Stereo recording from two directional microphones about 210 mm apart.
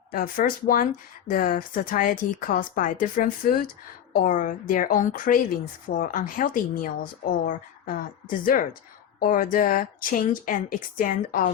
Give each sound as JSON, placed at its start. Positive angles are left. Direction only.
{"t": 0.1, "sound": "speech", "side_deg": 40}